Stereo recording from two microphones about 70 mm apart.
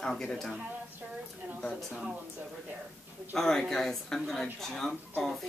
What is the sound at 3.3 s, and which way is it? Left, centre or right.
Speech, centre.